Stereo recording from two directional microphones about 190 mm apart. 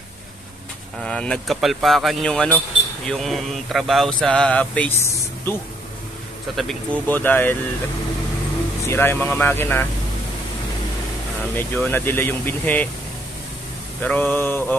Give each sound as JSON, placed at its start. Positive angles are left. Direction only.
{"t": 1.0, "sound": "speech", "side_deg": 5}
{"t": 6.5, "sound": "speech", "side_deg": 0}
{"t": 8.8, "sound": "speech", "side_deg": 10}
{"t": 11.5, "sound": "speech", "side_deg": 10}
{"t": 14.0, "sound": "speech", "side_deg": 10}